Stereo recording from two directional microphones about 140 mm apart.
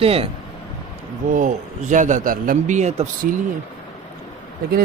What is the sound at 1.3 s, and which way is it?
A man's voice, 65° right (ahead or behind).